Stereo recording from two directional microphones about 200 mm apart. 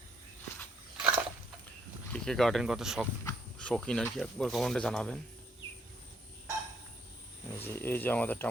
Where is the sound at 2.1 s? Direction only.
Centre (ahead or behind).